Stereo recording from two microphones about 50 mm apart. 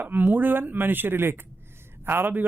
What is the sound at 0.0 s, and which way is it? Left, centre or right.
Speech, right.